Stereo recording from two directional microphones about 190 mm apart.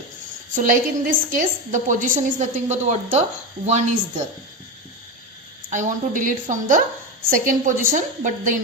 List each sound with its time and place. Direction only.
0.5 s a woman's voice: 45° right (ahead or behind)
5.7 s a woman's voice: 45° right (ahead or behind)